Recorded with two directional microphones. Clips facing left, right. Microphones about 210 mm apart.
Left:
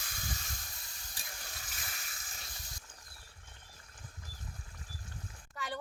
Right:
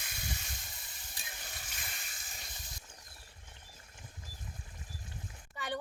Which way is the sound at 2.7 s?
20° right (ahead or behind).